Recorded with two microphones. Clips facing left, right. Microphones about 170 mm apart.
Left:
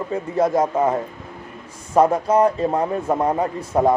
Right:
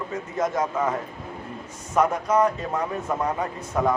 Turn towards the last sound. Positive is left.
turn(degrees=30)  # may be behind; listen again after turning